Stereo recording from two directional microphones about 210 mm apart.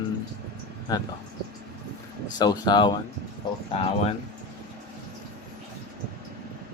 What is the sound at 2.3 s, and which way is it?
Speech, 20° left (ahead or behind).